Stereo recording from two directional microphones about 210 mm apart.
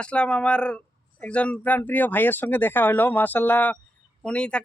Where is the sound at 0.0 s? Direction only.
5° left (ahead or behind).